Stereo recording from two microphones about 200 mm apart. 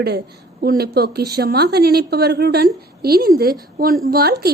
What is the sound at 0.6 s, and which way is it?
A woman's voice, 50° right (ahead or behind).